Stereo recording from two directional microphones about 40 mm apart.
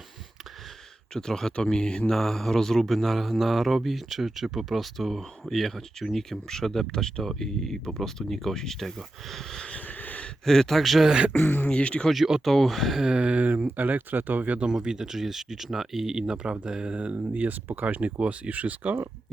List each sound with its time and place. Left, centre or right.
1.1 s speech: centre
2.1 s speech: centre
9.8 s a sound: left
10.4 s speech: centre
11.4 s speech: left
11.7 s speech: left
12.1 s speech: centre
12.5 s speech: centre
13.1 s speech: right
13.7 s speech: right
14.7 s speech: centre
17.3 s speech: right
17.8 s speech: right